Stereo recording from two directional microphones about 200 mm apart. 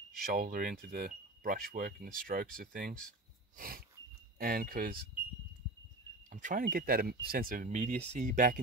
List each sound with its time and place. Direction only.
0.2 s speech: 45° right (ahead or behind)
3.5 s a sound: 45° right (ahead or behind)
4.4 s speech: 45° right (ahead or behind)
6.3 s speech: 40° right (ahead or behind)